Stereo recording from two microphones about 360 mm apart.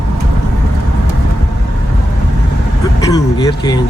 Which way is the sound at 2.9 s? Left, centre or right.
Centre.